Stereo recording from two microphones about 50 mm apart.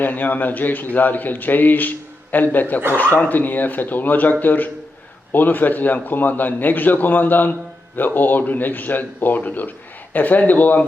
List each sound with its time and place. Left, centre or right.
0.0 s speech: left